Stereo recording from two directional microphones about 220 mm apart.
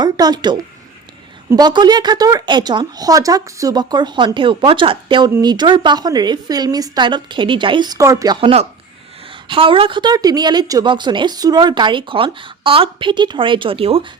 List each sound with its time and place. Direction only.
0.0 s speech: 20° right (ahead or behind)